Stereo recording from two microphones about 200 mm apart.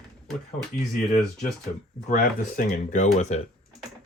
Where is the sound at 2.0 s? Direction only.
40° left (ahead or behind).